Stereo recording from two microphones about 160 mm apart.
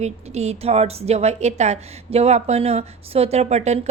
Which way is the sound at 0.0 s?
45° right (ahead or behind).